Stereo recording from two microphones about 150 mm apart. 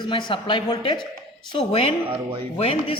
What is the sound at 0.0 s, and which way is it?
A man's voice, 35° left (ahead or behind).